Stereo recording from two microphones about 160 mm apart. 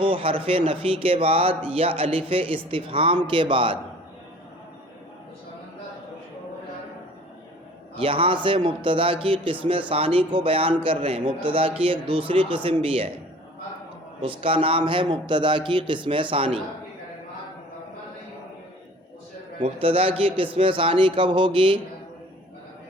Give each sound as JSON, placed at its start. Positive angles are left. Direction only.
{"t": 0.0, "sound": "speech", "side_deg": -35}
{"t": 7.9, "sound": "speech", "side_deg": -35}
{"t": 14.2, "sound": "speech", "side_deg": -35}
{"t": 19.6, "sound": "speech", "side_deg": -35}